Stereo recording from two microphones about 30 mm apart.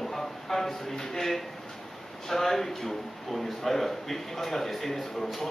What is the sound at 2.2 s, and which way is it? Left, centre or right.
A man's voice, centre.